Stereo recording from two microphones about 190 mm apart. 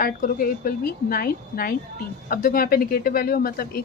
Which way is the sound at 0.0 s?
50° left (ahead or behind).